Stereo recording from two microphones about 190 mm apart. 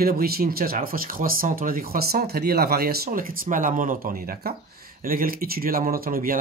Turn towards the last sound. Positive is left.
turn(degrees=-50)  # may be behind; listen again after turning